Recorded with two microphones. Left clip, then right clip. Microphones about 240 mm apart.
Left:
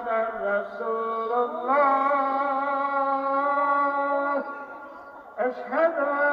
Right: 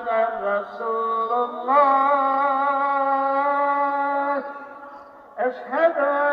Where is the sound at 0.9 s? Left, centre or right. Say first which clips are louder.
Right 4 dB; centre.